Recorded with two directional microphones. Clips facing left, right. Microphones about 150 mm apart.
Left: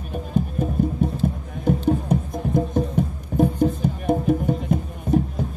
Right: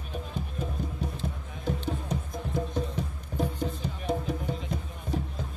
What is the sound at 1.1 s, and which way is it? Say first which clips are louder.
Music: left 11 dB; 50° left (ahead or behind).